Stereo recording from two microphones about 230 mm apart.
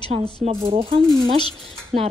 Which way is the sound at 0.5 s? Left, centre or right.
Right.